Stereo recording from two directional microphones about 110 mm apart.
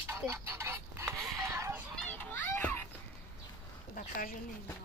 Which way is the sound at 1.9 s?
15° left (ahead or behind).